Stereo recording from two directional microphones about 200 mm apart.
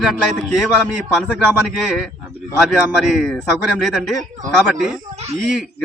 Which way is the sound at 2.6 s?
Centre (ahead or behind).